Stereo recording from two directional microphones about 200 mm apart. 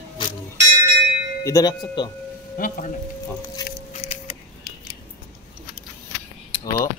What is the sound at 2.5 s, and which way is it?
Speech, 45° left (ahead or behind).